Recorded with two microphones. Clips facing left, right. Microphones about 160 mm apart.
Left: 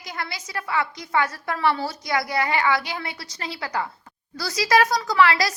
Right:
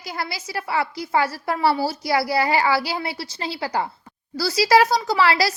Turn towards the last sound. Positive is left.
turn(degrees=-30)  # may be behind; listen again after turning